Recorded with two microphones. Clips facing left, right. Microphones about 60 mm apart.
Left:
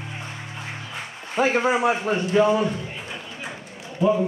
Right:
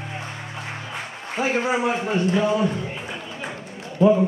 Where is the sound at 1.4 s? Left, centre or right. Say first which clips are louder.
Left 3 dB; left.